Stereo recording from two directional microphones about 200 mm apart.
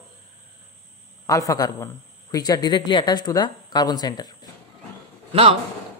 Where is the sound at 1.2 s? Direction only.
15° left (ahead or behind).